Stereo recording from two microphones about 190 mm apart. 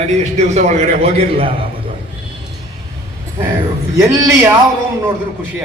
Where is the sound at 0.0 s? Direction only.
40° right (ahead or behind).